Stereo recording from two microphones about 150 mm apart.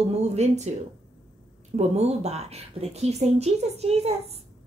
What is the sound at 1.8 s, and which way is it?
A woman's voice, 45° right (ahead or behind).